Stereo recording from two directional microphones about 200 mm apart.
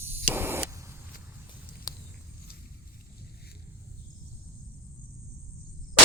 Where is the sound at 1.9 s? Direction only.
20° left (ahead or behind).